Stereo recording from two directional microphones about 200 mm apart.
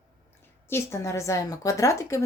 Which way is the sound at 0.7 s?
15° left (ahead or behind).